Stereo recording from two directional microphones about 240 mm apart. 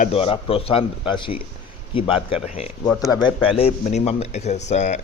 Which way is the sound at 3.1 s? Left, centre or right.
Centre.